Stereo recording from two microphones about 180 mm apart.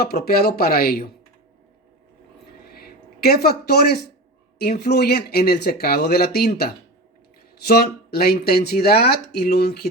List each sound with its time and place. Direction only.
0.0 s speech: 60° left (ahead or behind)
2.6 s a sound: 60° left (ahead or behind)
4.5 s speech: 60° left (ahead or behind)